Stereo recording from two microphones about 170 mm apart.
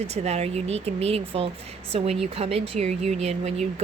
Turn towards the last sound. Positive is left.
turn(degrees=-40)  # may be behind; listen again after turning